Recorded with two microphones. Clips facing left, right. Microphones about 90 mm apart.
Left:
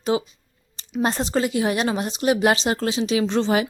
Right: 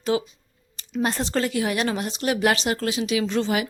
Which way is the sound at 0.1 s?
25° left (ahead or behind).